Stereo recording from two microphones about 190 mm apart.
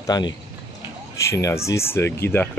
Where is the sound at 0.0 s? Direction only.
20° left (ahead or behind).